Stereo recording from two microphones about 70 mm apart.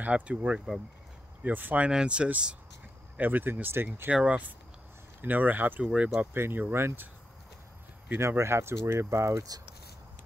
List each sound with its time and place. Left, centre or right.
0.0 s speech: centre
1.9 s speech: centre; by 4.1 s right
4.1 s speech: centre
8.2 s speech: right